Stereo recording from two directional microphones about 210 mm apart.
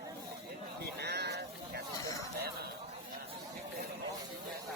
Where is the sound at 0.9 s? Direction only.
50° right (ahead or behind).